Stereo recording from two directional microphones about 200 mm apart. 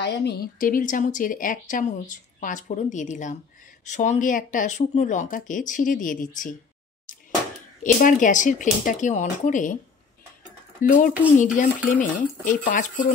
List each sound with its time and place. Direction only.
0.0 s a woman's voice: 55° left (ahead or behind)
7.8 s a woman's voice: 40° left (ahead or behind)
10.8 s a woman's voice: 40° left (ahead or behind)